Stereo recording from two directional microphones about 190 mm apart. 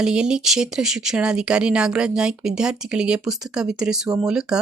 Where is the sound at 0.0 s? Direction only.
5° right (ahead or behind).